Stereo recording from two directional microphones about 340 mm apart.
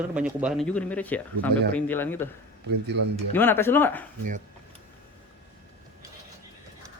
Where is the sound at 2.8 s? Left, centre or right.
Right.